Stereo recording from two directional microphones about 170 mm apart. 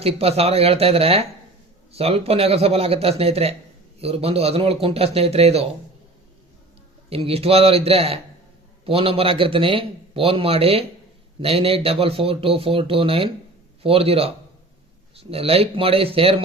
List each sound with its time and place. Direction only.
0.0 s a man's voice: 35° right (ahead or behind)
7.1 s a man's voice: 35° right (ahead or behind)